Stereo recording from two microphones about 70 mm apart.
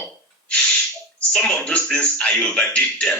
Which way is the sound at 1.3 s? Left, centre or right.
Centre.